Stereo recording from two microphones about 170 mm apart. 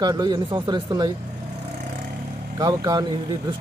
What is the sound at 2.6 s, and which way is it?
Speech, 25° right (ahead or behind).